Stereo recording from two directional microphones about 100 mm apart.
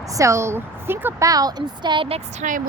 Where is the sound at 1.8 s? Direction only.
50° right (ahead or behind).